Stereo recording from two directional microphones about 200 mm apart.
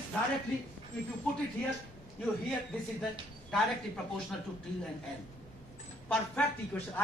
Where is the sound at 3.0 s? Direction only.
Centre (ahead or behind).